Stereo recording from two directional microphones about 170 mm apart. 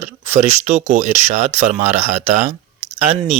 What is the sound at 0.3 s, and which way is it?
Speech, 45° right (ahead or behind).